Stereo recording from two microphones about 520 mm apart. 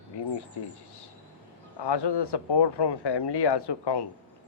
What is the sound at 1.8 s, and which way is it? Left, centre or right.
Speech, left.